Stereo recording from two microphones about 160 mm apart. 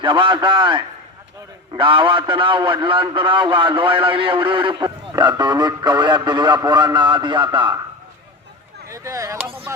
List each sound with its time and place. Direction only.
0.0 s a man's voice: 30° right (ahead or behind)
8.9 s speech: 20° right (ahead or behind)